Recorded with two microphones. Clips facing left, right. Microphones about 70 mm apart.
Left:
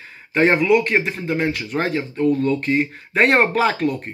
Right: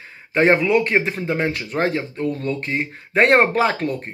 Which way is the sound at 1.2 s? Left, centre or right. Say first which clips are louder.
Even; right.